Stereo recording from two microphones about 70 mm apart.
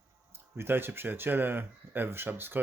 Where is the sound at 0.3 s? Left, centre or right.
Right.